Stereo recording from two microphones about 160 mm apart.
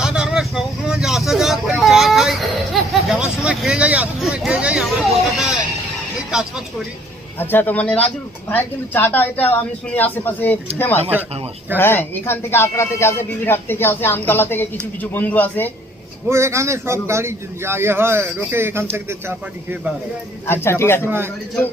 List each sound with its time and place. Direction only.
0.0 s vehicle: 5° right (ahead or behind)
3.1 s hubbub: 5° right (ahead or behind)
6.3 s speech: 5° right (ahead or behind)
7.3 s speech: 10° left (ahead or behind)
16.3 s a man's voice: 15° right (ahead or behind)
20.5 s speech: 15° left (ahead or behind)